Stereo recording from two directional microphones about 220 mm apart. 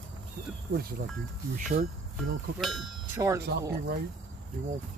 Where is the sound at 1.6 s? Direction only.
35° right (ahead or behind).